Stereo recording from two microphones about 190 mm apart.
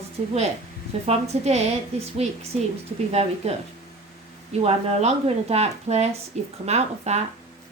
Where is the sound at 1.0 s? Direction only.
35° right (ahead or behind).